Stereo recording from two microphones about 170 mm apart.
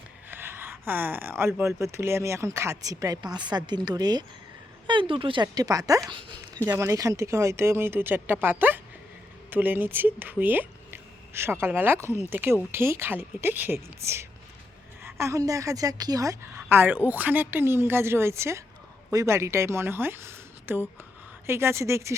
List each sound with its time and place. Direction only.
0.3 s speech: 15° right (ahead or behind); by 6.6 s 30° right (ahead or behind)
6.7 s a woman's voice: 20° right (ahead or behind)